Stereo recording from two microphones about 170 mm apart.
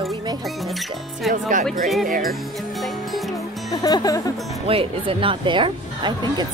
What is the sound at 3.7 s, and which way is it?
Speech, 20° left (ahead or behind).